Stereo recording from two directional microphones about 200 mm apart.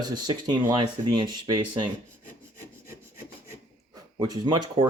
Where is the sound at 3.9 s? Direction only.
20° right (ahead or behind).